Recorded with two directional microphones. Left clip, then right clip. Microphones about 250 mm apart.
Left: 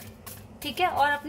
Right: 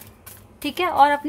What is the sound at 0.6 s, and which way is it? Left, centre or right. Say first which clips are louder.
Speech: right 7 dB; right.